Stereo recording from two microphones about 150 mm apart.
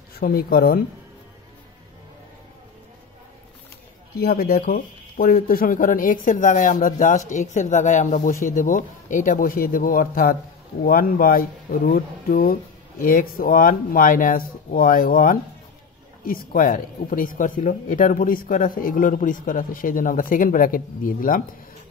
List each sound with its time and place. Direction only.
0.2 s speech: 80° left
4.1 s speech: 90° left; by 21.4 s 65° left (ahead or behind)